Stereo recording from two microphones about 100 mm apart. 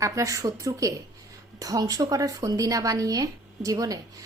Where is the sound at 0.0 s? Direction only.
30° right (ahead or behind).